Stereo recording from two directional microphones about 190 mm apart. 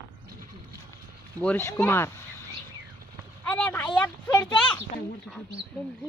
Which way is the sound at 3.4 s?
10° left (ahead or behind).